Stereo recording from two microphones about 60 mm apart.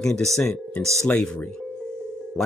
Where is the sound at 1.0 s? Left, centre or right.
Centre.